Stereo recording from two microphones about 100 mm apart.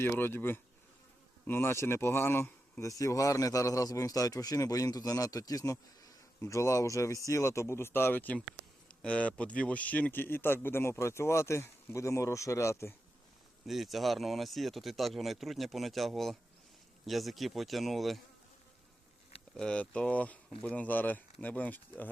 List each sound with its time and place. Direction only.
0.0 s speech: 20° left (ahead or behind)
2.9 s speech: 35° left (ahead or behind)
13.7 s speech: centre (ahead or behind)
19.5 s speech: 10° left (ahead or behind)